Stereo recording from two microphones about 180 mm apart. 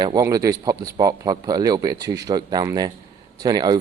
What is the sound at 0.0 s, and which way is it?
Speech, 20° right (ahead or behind).